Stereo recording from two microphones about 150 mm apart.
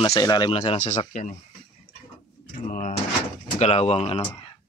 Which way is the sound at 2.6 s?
65° left (ahead or behind).